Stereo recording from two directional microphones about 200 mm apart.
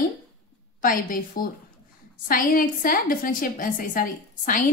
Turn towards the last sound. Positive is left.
turn(degrees=45)  # may be behind; listen again after turning